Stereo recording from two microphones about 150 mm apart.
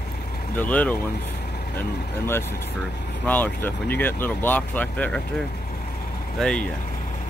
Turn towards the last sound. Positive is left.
turn(degrees=5)  # may be behind; listen again after turning